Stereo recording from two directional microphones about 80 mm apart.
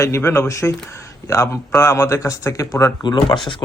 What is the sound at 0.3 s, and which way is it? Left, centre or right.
Speech, left.